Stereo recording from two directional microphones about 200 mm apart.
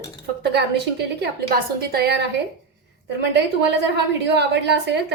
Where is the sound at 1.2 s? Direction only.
50° right (ahead or behind).